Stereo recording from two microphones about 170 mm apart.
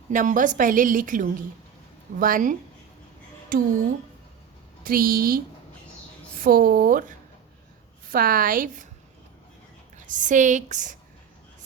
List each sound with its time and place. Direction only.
0.1 s a woman's voice: 50° right (ahead or behind)
4.8 s a woman's voice: 60° right (ahead or behind)
6.4 s a woman's voice: 55° right (ahead or behind)
10.1 s a woman's voice: 50° right (ahead or behind)